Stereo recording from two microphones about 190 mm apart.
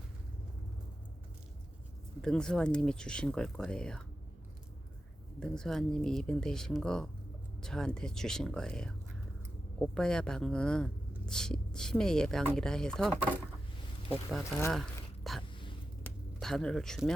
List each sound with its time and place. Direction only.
2.2 s speech: 5° left (ahead or behind)
5.4 s speech: centre (ahead or behind)
14.7 s a sound: centre (ahead or behind)